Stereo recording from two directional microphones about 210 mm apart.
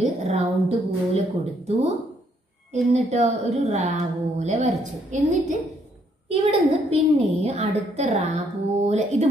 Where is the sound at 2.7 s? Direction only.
35° right (ahead or behind).